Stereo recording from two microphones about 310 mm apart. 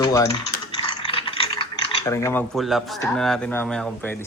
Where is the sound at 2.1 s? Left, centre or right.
Centre.